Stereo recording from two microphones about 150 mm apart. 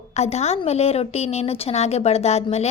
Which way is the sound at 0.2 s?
45° left (ahead or behind).